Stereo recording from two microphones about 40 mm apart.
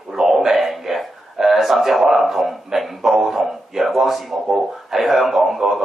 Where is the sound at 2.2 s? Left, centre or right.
Centre.